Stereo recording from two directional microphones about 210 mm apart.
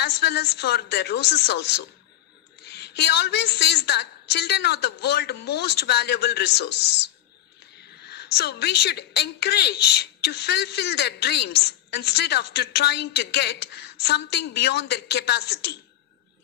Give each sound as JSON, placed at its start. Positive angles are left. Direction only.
{"t": 0.0, "sound": "a woman's voice", "side_deg": 50}
{"t": 8.0, "sound": "a woman's voice", "side_deg": 50}